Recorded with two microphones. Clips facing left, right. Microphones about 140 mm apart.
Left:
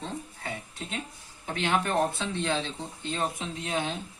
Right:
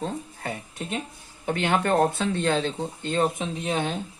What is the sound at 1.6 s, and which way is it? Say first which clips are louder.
Speech: right 4 dB; 55° right (ahead or behind).